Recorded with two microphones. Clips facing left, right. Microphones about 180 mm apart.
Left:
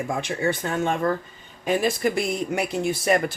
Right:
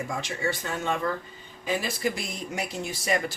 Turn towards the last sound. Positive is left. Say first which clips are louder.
# left 6 dB
turn(degrees=55)  # may be behind; listen again after turning